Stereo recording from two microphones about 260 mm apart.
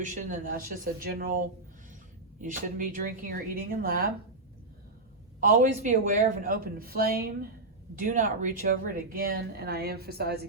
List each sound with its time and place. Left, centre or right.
0.0 s speech: right
5.4 s speech: right